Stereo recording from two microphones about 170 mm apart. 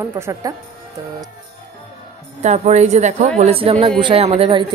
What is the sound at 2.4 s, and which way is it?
A woman's voice, 40° right (ahead or behind).